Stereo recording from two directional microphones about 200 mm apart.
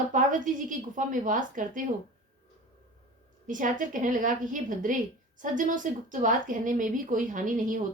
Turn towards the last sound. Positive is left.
turn(degrees=-40)  # may be behind; listen again after turning